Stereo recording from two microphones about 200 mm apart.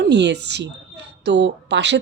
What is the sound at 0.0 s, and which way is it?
Speech, 60° right (ahead or behind).